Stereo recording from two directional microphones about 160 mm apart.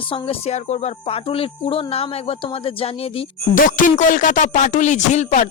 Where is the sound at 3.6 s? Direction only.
55° left (ahead or behind).